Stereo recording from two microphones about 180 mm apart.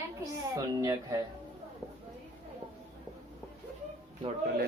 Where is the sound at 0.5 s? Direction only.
20° right (ahead or behind).